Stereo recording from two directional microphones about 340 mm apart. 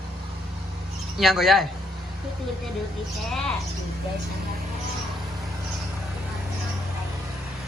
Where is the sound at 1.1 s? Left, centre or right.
Centre.